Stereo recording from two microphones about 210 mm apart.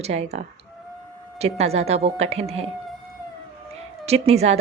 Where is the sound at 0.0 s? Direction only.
30° right (ahead or behind).